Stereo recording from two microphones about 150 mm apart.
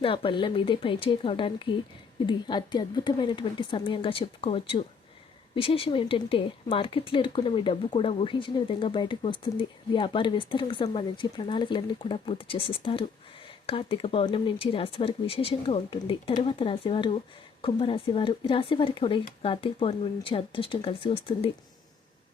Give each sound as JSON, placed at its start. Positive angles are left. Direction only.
{"t": 0.0, "sound": "speech", "side_deg": 35}